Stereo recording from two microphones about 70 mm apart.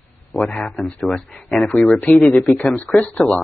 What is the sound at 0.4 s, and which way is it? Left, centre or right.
Speech, left.